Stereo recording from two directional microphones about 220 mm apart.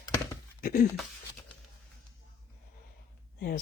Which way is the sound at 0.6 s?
40° left (ahead or behind).